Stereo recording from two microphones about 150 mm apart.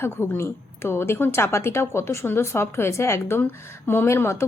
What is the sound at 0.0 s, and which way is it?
A woman's voice, 15° left (ahead or behind).